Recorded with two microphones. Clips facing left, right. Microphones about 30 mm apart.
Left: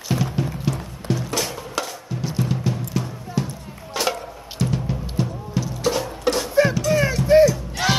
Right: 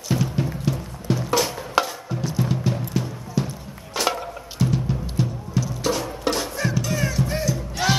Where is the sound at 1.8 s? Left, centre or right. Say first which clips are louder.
Right 6 dB; right.